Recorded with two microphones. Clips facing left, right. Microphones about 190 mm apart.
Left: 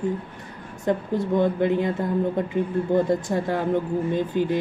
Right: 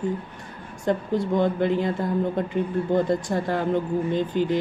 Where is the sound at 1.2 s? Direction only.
20° left (ahead or behind).